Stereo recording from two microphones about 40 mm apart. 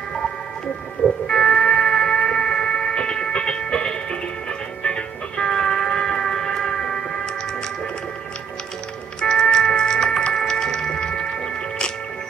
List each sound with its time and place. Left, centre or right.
1.0 s music: centre
9.2 s cat: centre